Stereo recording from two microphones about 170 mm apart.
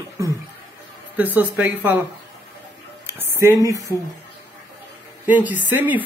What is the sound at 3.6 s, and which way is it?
Speech, 20° right (ahead or behind).